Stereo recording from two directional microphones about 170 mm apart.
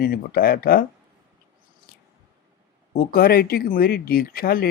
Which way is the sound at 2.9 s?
60° left (ahead or behind).